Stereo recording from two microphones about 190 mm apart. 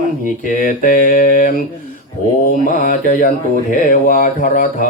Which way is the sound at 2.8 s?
45° left (ahead or behind).